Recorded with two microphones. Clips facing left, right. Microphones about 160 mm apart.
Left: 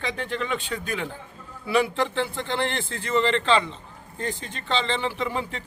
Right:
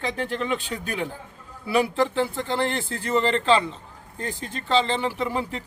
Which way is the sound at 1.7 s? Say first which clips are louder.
Right 1 dB; 10° right (ahead or behind).